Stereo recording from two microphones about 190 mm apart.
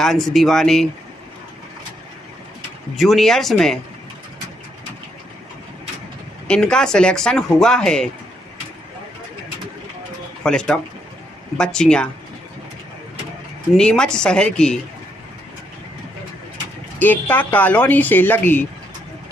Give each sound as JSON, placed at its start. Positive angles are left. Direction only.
{"t": 0.0, "sound": "speech", "side_deg": 0}
{"t": 2.9, "sound": "speech", "side_deg": 0}
{"t": 6.5, "sound": "speech", "side_deg": 5}
{"t": 10.4, "sound": "speech", "side_deg": 5}
{"t": 13.7, "sound": "speech", "side_deg": 5}
{"t": 17.0, "sound": "speech", "side_deg": 10}